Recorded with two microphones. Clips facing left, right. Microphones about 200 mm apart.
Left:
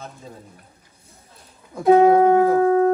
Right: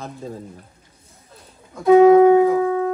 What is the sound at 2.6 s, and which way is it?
Howl, 40° left (ahead or behind).